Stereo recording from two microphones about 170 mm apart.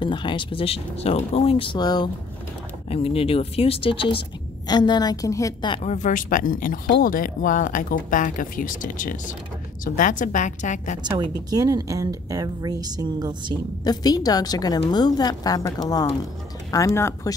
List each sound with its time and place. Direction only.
0.0 s a woman's voice: 30° left (ahead or behind)
2.9 s a woman's voice: 35° left (ahead or behind)
5.8 s speech: 45° left (ahead or behind)
11.0 s a woman's voice: 25° right (ahead or behind)
13.8 s a woman's voice: 20° left (ahead or behind)